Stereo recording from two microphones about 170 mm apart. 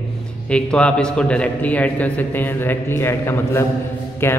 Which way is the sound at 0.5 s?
5° left (ahead or behind).